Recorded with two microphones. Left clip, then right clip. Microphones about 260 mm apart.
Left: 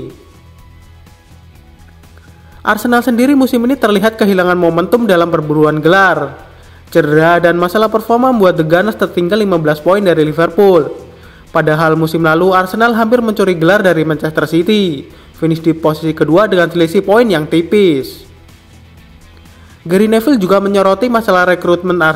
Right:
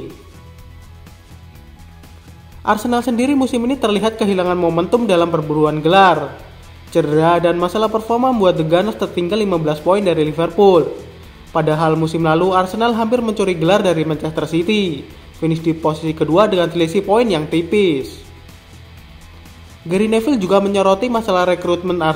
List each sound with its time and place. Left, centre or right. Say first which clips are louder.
2.6 s a man's voice: left 5 dB; left
19.9 s a man's voice: left 5 dB; left